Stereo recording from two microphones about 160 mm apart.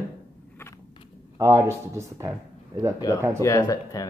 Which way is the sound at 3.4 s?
20° left (ahead or behind).